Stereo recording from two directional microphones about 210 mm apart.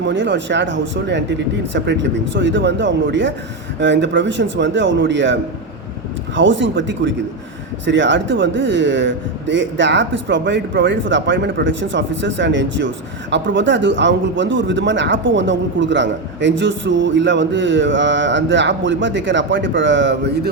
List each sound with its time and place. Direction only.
0.0 s speech: 60° right (ahead or behind)